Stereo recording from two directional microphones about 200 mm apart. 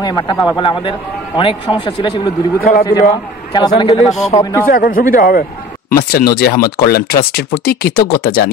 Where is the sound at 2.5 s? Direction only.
45° left (ahead or behind).